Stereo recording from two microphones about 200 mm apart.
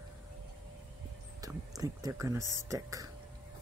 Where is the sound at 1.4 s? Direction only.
15° right (ahead or behind).